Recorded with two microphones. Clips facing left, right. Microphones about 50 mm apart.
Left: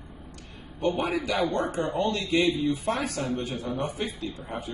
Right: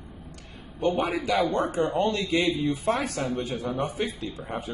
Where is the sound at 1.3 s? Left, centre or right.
Right.